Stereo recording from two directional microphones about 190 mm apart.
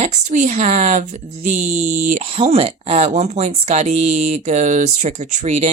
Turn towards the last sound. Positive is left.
turn(degrees=-35)  # may be behind; listen again after turning